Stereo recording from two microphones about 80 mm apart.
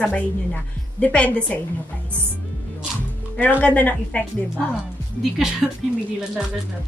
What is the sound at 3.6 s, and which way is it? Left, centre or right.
Speech, centre.